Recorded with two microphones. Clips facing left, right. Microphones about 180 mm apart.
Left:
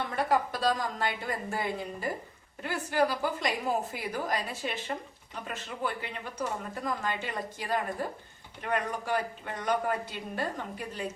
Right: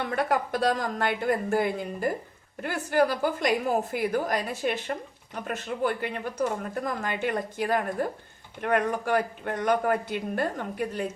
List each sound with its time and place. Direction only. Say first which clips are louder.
0.3 s speech: even; 60° right (ahead or behind)